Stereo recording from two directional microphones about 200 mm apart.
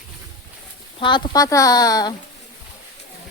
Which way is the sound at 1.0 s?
25° left (ahead or behind).